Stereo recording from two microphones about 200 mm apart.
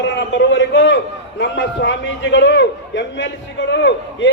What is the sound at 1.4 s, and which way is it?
A man's voice, 60° left (ahead or behind).